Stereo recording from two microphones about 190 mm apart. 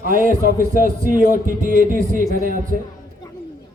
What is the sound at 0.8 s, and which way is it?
A man's voice, 45° right (ahead or behind).